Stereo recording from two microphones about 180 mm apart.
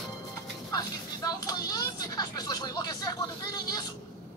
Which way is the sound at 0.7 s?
20° left (ahead or behind).